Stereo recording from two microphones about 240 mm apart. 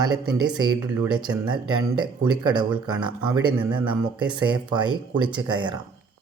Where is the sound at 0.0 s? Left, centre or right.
Centre.